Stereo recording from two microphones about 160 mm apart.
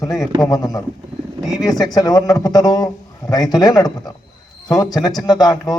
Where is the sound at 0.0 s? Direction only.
20° left (ahead or behind).